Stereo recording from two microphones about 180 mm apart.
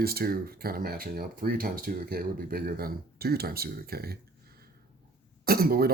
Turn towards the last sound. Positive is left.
turn(degrees=-55)  # may be behind; listen again after turning